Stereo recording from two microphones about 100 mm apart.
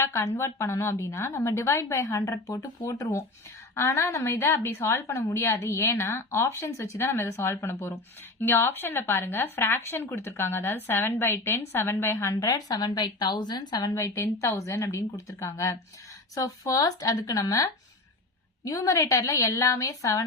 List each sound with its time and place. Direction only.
0.0 s a woman's voice: 30° left (ahead or behind)